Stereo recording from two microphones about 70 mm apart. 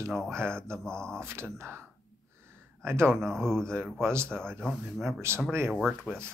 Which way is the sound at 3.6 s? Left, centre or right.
Right.